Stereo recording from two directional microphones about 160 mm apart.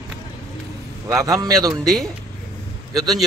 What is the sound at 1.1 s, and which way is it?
Speech, 20° right (ahead or behind).